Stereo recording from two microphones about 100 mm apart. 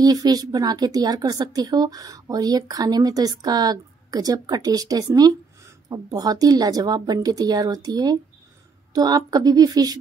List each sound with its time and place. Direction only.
0.0 s a woman's voice: 40° right (ahead or behind)